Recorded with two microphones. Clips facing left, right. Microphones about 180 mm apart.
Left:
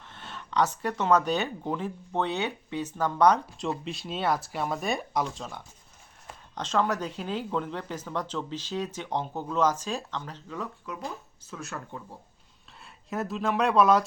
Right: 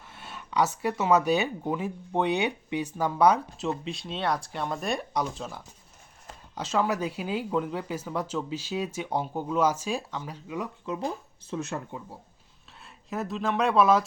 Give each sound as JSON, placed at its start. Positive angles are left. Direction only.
{"t": 0.1, "sound": "speech", "side_deg": -10}
{"t": 10.9, "sound": "speech", "side_deg": -25}
{"t": 11.9, "sound": "speech", "side_deg": -10}
{"t": 12.8, "sound": "speech", "side_deg": 0}